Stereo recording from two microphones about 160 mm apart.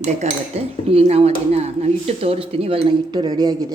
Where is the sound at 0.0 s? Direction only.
45° right (ahead or behind).